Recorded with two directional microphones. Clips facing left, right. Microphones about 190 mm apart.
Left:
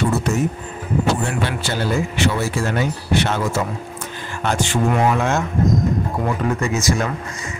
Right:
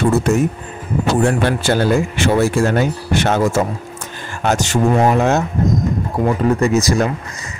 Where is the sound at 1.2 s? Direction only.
50° right (ahead or behind).